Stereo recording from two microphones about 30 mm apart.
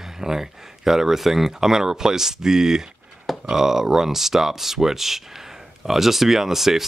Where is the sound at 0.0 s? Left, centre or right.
Centre.